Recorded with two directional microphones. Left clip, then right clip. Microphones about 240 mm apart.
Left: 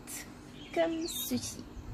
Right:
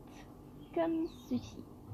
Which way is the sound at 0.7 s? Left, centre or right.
Left.